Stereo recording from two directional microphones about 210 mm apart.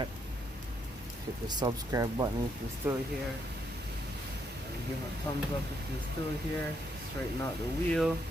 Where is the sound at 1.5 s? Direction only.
20° right (ahead or behind).